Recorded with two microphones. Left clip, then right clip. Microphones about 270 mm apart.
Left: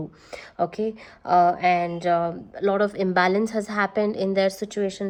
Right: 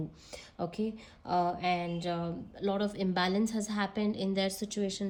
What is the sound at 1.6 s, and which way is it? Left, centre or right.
A woman's voice, centre.